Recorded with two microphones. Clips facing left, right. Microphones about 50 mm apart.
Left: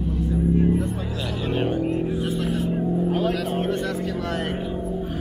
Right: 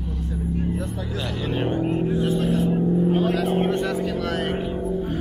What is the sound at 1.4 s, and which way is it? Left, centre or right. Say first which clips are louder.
Music: left 1 dB; centre.